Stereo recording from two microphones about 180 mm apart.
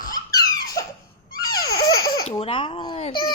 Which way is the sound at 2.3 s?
30° left (ahead or behind).